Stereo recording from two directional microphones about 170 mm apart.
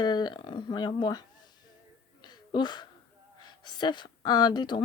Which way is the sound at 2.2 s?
25° left (ahead or behind).